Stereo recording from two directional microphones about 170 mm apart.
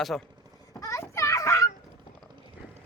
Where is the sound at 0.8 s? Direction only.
15° left (ahead or behind).